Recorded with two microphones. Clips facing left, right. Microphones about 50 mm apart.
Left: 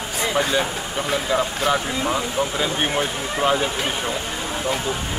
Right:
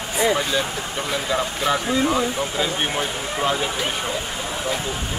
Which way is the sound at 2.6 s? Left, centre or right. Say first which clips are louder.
Right 1 dB; centre.